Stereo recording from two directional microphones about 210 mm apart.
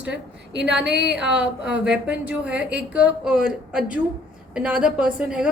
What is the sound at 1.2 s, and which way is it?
A woman's voice, 5° right (ahead or behind).